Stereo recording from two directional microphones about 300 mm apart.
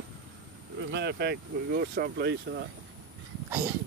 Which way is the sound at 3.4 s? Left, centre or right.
Centre.